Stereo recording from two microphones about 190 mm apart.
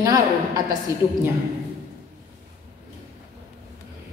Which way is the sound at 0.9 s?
15° right (ahead or behind).